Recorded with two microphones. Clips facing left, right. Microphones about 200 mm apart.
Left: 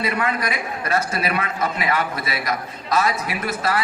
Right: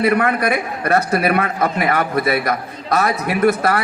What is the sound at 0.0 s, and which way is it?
A woman's voice, 60° right (ahead or behind).